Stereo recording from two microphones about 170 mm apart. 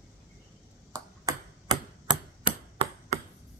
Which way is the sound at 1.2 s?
25° right (ahead or behind).